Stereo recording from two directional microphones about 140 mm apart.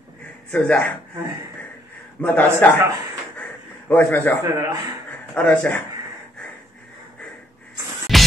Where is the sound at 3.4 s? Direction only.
10° left (ahead or behind).